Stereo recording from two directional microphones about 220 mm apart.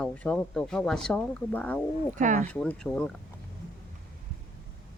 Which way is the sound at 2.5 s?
5° left (ahead or behind).